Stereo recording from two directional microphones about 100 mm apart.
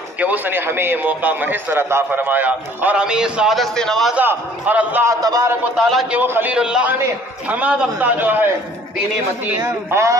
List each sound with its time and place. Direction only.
0.2 s a man's voice: 20° right (ahead or behind); by 4.1 s 5° left (ahead or behind)
4.1 s a man's voice: 15° right (ahead or behind)
5.0 s a man's voice: 35° right (ahead or behind)
5.8 s a man's voice: centre (ahead or behind)
6.0 s a man's voice: 20° right (ahead or behind)
6.5 s a man's voice: 10° right (ahead or behind)
9.6 s a man's voice: 30° right (ahead or behind)